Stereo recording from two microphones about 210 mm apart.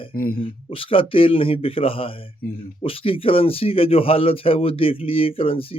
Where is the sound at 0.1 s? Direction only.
45° left (ahead or behind).